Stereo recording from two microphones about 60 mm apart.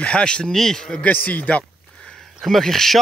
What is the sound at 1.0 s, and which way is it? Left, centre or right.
Speech, left.